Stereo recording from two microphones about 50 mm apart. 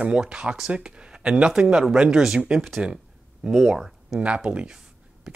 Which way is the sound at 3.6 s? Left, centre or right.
Centre.